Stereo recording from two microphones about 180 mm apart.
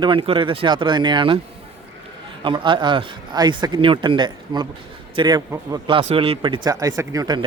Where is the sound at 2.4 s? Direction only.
25° right (ahead or behind).